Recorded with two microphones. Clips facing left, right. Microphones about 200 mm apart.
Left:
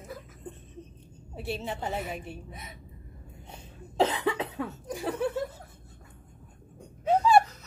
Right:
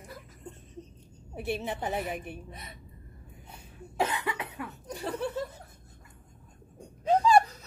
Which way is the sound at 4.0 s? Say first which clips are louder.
Left 5 dB; 30° left (ahead or behind).